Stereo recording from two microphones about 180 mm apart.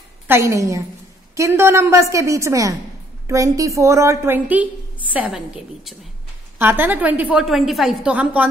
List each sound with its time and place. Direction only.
0.3 s a woman's voice: 15° right (ahead or behind)